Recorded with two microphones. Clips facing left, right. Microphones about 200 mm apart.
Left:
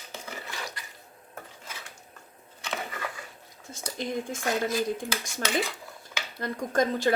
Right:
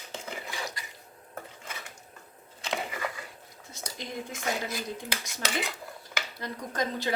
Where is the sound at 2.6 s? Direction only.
25° right (ahead or behind).